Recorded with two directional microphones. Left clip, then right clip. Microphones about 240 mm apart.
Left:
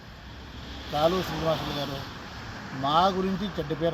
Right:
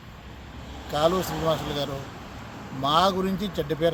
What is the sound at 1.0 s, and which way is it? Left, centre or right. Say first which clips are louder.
Speech: right 2 dB; right.